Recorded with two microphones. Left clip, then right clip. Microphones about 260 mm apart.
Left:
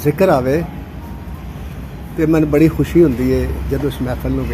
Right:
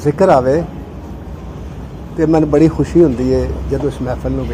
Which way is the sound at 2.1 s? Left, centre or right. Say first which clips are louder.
Right 2 dB; centre.